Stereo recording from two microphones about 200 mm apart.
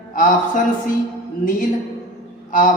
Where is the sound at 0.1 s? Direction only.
40° left (ahead or behind).